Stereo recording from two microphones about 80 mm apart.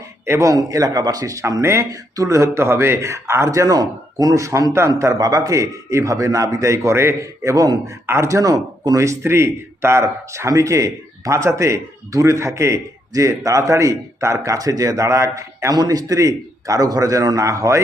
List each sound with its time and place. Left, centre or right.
0.3 s a man's voice: right
8.0 s a man's voice: right
15.7 s a man's voice: right